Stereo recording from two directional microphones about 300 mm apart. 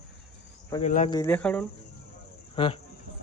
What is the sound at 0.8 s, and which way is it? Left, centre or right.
Speech, left.